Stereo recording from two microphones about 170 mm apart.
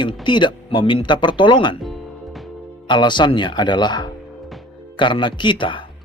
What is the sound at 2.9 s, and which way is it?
Speech, 25° left (ahead or behind).